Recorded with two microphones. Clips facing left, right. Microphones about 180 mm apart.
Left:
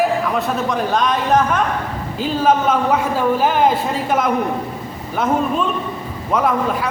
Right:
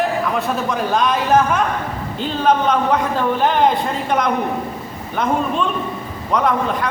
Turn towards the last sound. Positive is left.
turn(degrees=5)  # may be behind; listen again after turning